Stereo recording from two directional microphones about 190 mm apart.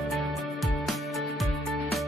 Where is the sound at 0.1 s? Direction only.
Centre (ahead or behind).